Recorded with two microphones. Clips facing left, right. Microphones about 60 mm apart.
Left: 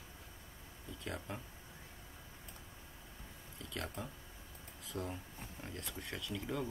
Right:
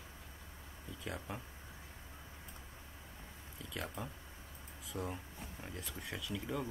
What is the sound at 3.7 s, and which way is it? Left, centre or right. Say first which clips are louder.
Speech: even; centre.